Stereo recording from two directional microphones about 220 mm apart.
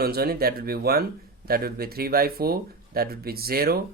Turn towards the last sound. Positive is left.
turn(degrees=-45)  # may be behind; listen again after turning